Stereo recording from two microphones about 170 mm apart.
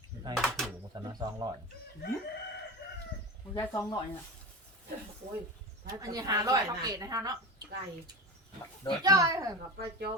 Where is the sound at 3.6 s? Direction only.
20° left (ahead or behind).